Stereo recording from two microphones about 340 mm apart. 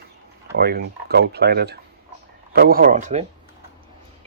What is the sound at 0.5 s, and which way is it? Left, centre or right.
Cutlery, right.